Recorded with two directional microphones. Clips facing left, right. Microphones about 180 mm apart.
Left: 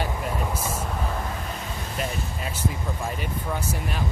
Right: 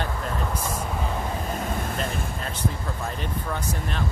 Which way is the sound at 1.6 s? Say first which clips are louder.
Right 6 dB; 50° right (ahead or behind).